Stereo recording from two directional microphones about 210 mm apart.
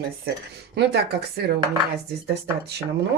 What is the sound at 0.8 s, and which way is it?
Speech, 50° right (ahead or behind).